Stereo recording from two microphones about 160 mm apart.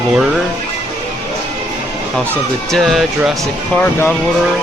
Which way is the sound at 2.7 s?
Centre (ahead or behind).